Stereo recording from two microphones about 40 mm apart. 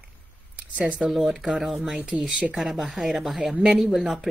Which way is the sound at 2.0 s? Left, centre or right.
Right.